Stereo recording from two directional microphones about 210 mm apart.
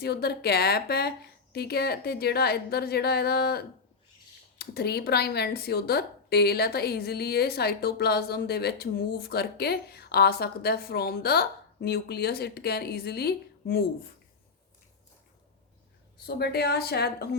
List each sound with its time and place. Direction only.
0.0 s speech: 50° left (ahead or behind)
16.1 s speech: 50° left (ahead or behind)